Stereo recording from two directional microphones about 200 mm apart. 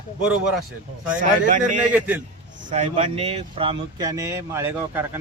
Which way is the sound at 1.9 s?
10° right (ahead or behind).